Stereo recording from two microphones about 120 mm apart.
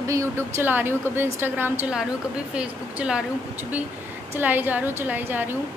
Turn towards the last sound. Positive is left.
turn(degrees=-15)  # may be behind; listen again after turning